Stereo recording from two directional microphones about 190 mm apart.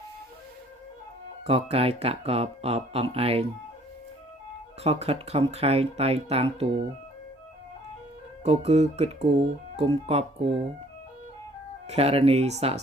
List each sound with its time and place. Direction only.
1.5 s speech: 30° right (ahead or behind)
4.8 s speech: 35° right (ahead or behind)
8.4 s speech: 35° right (ahead or behind)
11.9 s speech: 35° right (ahead or behind)